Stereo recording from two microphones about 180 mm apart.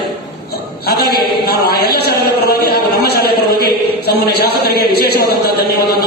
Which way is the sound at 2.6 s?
60° left (ahead or behind).